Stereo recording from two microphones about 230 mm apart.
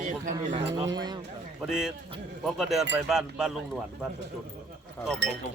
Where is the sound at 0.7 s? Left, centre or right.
Centre.